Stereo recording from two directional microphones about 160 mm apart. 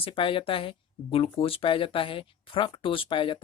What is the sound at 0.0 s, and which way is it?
Speech, 35° left (ahead or behind).